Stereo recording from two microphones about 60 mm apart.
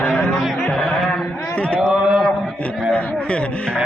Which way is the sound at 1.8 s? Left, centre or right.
Centre.